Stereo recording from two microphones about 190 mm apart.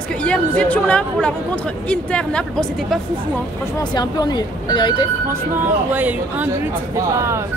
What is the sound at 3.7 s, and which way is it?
Speech, 20° left (ahead or behind).